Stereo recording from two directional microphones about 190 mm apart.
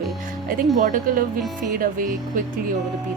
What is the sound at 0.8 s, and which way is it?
Speech, 45° right (ahead or behind).